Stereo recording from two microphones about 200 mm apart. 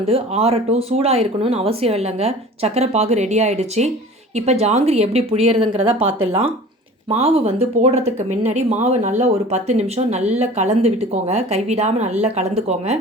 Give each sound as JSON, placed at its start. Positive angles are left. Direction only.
{"t": 0.0, "sound": "speech", "side_deg": -30}
{"t": 7.1, "sound": "speech", "side_deg": -30}